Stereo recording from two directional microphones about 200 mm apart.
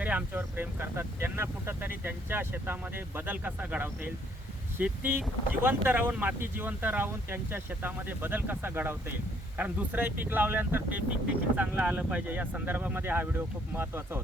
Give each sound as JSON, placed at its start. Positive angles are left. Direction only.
{"t": 0.0, "sound": "speech", "side_deg": -10}